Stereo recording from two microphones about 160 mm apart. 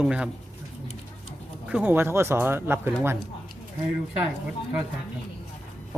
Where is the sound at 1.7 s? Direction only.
10° right (ahead or behind).